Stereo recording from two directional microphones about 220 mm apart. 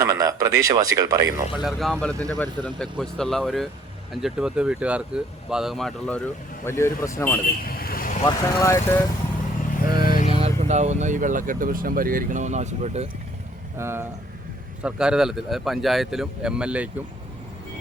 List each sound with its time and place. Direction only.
0.0 s speech: 15° right (ahead or behind)
1.6 s speech: centre (ahead or behind)
7.6 s vehicle: 45° left (ahead or behind)
8.2 s speech: 15° left (ahead or behind)
9.8 s vehicle: 20° right (ahead or behind)
10.2 s vehicle: 25° left (ahead or behind)
10.4 s speech: 30° right (ahead or behind)
13.7 s speech: 10° right (ahead or behind)